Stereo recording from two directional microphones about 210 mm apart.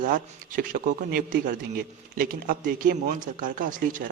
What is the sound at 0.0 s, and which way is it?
Speech, 40° right (ahead or behind).